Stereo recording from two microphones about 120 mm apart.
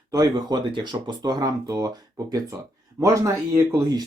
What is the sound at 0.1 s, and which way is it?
Speech, 35° right (ahead or behind).